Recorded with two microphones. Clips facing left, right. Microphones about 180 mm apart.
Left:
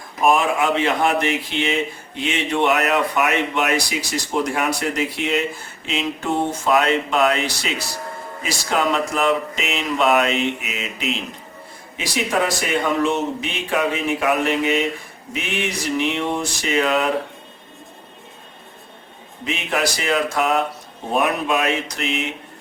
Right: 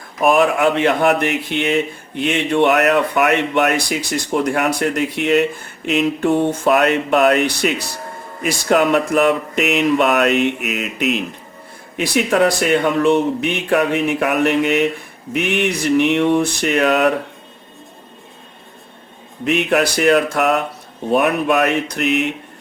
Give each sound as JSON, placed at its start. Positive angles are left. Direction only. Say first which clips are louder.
{"t": 0.3, "sound": "speech", "louder": "right 5 dB", "side_deg": -65}
{"t": 19.5, "sound": "speech", "louder": "right 7 dB", "side_deg": -65}